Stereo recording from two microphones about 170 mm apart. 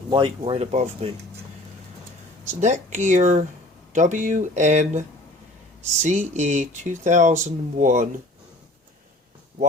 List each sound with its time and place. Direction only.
0.1 s speech: 30° right (ahead or behind)
2.4 s speech: 45° right (ahead or behind)